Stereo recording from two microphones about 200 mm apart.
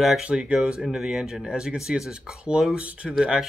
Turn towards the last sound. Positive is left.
turn(degrees=-5)  # may be behind; listen again after turning